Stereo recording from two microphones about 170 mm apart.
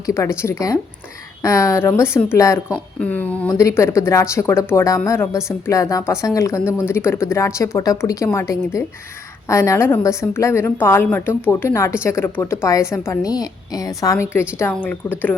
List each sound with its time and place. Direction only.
0.0 s speech: 15° left (ahead or behind)